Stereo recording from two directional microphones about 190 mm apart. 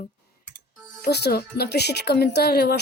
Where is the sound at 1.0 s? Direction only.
60° left (ahead or behind).